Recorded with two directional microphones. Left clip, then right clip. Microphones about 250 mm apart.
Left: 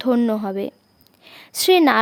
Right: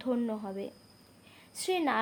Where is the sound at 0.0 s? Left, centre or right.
Left.